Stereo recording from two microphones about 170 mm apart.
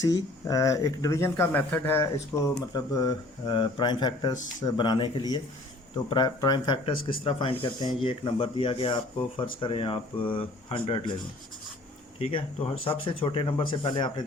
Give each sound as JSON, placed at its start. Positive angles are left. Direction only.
{"t": 0.0, "sound": "speech", "side_deg": 20}
{"t": 12.2, "sound": "speech", "side_deg": 30}